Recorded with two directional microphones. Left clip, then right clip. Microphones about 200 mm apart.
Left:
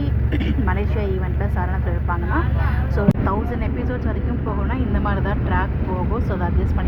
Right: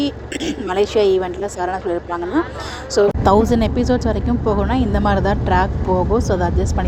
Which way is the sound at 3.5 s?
60° right (ahead or behind).